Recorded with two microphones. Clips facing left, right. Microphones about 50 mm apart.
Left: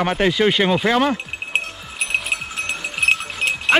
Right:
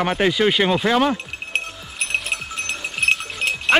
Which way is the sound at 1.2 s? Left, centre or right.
Centre.